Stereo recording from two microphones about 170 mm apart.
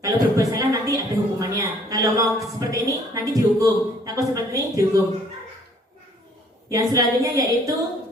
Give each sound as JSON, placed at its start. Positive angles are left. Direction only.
{"t": 0.0, "sound": "a woman's voice", "side_deg": -20}
{"t": 6.7, "sound": "a woman's voice", "side_deg": -20}